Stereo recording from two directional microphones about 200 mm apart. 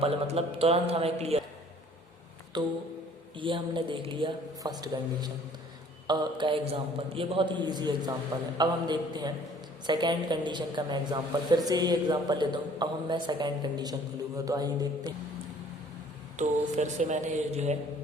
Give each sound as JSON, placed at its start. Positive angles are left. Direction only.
{"t": 0.0, "sound": "a man's voice", "side_deg": -30}
{"t": 2.5, "sound": "a woman's voice", "side_deg": -20}
{"t": 16.4, "sound": "a man's voice", "side_deg": -35}